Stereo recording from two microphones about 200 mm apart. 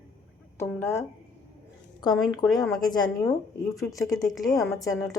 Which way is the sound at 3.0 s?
15° left (ahead or behind).